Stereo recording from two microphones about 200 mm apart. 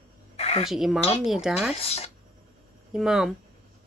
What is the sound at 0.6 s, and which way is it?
Speech, centre (ahead or behind).